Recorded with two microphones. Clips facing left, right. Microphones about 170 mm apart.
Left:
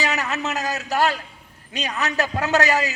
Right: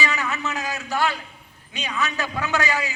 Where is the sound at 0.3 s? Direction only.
75° left (ahead or behind).